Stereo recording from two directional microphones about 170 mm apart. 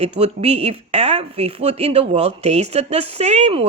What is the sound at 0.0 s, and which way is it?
Speech, 40° right (ahead or behind).